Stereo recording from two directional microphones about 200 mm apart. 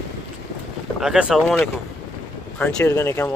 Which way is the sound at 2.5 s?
5° left (ahead or behind).